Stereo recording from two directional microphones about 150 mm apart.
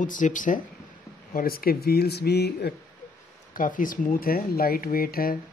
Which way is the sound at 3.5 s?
65° left (ahead or behind).